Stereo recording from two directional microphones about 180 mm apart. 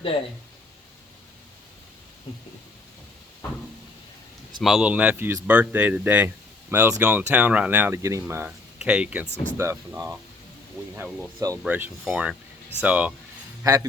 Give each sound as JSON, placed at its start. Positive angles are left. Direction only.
{"t": 4.6, "sound": "speech", "side_deg": -5}
{"t": 11.6, "sound": "speech", "side_deg": -5}
{"t": 13.7, "sound": "speech", "side_deg": -20}